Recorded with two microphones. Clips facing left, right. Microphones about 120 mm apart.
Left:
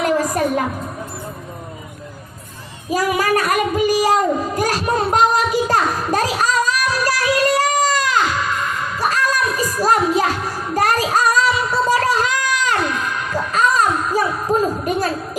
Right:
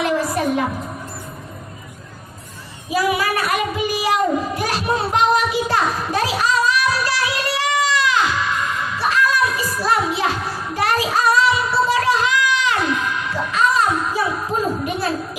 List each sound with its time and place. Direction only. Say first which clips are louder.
0.0 s music: left 2 dB; 45° left (ahead or behind)
2.9 s child singing: left 2 dB; 45° left (ahead or behind)